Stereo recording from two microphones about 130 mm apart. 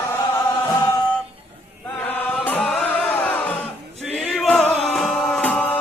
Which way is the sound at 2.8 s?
15° left (ahead or behind).